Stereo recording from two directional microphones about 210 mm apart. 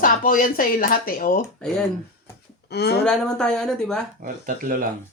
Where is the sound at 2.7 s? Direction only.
50° left (ahead or behind).